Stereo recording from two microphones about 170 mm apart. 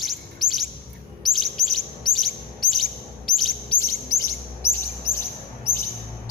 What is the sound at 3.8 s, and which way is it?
Bird, 15° left (ahead or behind).